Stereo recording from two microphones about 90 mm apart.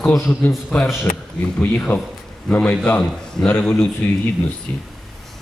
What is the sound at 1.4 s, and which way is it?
A man's voice, 15° left (ahead or behind).